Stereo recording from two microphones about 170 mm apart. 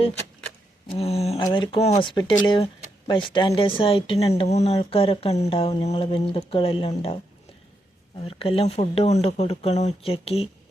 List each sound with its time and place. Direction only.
0.9 s speech: 35° left (ahead or behind)
8.3 s speech: 35° left (ahead or behind)